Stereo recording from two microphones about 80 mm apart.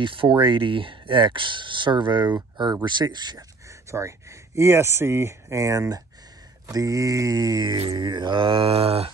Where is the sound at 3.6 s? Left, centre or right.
Right.